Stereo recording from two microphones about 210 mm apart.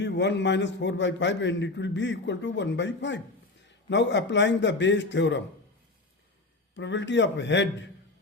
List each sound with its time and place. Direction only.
0.0 s a man's voice: 55° left (ahead or behind)
6.7 s a man's voice: 60° left (ahead or behind)